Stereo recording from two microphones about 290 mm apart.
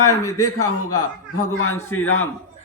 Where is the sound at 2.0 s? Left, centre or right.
Left.